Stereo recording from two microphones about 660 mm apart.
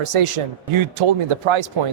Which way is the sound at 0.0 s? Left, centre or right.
Right.